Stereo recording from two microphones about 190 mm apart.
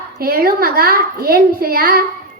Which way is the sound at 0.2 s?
50° right (ahead or behind).